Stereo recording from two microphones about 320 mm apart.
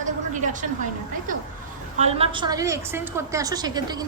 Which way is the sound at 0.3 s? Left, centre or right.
Right.